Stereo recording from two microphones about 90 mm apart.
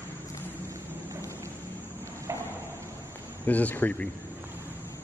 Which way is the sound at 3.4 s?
20° left (ahead or behind).